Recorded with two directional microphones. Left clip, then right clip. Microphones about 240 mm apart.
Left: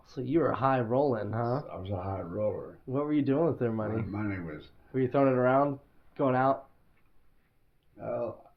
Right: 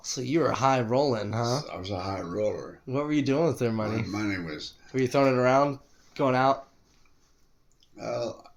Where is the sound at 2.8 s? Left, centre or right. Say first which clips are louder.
Right 2 dB; right.